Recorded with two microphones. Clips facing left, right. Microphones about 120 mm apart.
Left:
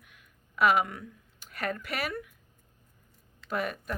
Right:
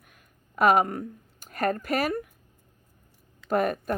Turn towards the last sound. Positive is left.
turn(degrees=-45)  # may be behind; listen again after turning